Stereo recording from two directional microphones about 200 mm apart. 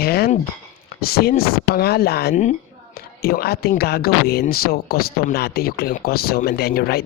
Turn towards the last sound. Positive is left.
turn(degrees=50)  # may be behind; listen again after turning